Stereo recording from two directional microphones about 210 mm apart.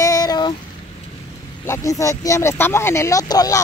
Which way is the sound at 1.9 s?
15° left (ahead or behind).